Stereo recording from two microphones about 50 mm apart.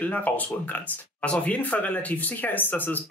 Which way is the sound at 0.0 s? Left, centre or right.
Left.